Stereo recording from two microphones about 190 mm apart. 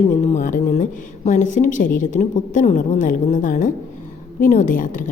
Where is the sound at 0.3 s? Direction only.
40° left (ahead or behind).